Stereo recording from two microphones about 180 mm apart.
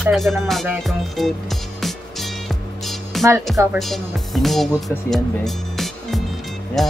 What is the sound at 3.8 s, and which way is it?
Speech, centre (ahead or behind).